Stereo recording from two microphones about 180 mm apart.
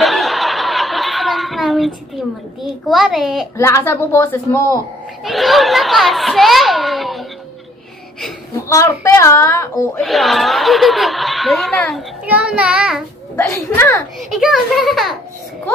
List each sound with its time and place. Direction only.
0.0 s snicker: centre (ahead or behind)
2.2 s a child's voice: centre (ahead or behind)
3.5 s a woman's voice: 15° left (ahead or behind)
5.2 s a child's voice: centre (ahead or behind)
8.6 s a woman's voice: 15° left (ahead or behind)
10.0 s a child's voice: centre (ahead or behind)
14.3 s a child's voice: centre (ahead or behind)